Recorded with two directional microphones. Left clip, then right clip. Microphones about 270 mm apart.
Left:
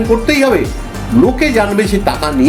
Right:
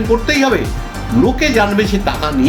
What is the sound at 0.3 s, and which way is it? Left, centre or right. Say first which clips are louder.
Speech: left 3 dB; centre.